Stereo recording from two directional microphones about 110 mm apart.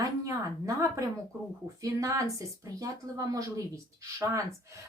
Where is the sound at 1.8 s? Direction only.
30° right (ahead or behind).